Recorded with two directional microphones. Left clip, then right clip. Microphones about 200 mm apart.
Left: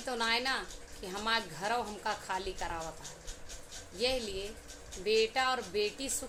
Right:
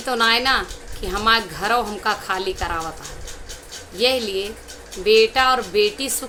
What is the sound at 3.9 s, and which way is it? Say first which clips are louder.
A woman's voice: right 14 dB; 10° right (ahead or behind).